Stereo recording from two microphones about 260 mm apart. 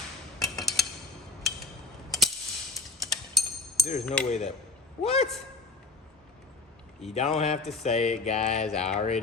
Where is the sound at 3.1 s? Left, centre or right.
Centre.